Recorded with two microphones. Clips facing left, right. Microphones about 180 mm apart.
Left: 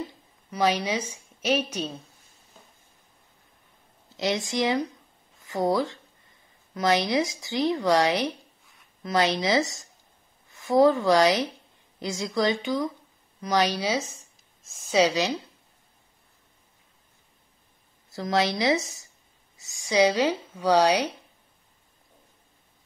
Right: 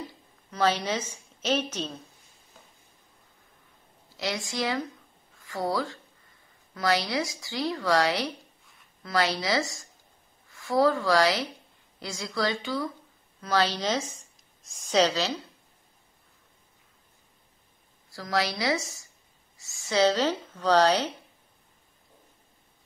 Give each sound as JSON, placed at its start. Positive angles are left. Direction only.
{"t": 0.5, "sound": "speech", "side_deg": 15}
{"t": 4.2, "sound": "speech", "side_deg": 20}
{"t": 18.1, "sound": "speech", "side_deg": 20}